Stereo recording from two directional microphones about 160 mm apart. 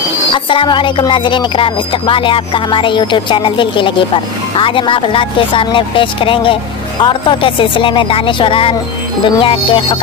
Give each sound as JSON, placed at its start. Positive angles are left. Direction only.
{"t": 0.3, "sound": "music", "side_deg": 30}